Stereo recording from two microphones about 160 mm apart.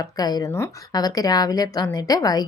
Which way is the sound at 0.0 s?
25° left (ahead or behind).